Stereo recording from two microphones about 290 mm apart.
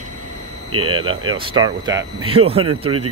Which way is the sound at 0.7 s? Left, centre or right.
Right.